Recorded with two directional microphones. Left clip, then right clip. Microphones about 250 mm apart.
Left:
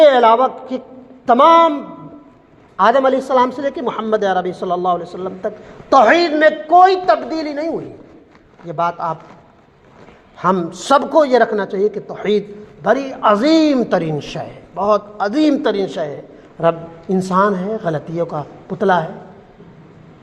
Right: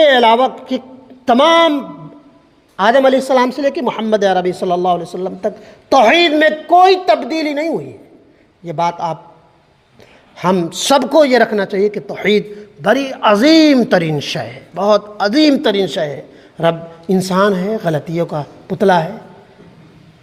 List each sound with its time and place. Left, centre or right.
0.0 s a man's voice: right
10.3 s a man's voice: right